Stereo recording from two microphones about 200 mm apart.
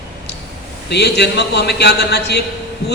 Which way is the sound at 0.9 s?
55° left (ahead or behind).